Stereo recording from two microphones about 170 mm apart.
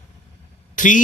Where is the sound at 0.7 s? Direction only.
50° left (ahead or behind).